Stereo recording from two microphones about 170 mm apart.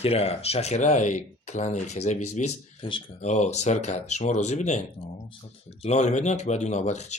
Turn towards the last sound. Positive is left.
turn(degrees=40)  # may be behind; listen again after turning